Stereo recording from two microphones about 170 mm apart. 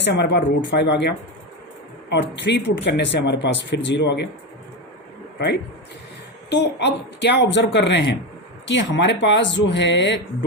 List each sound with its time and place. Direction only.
0.0 s speech: 90° left
6.5 s speech: 90° left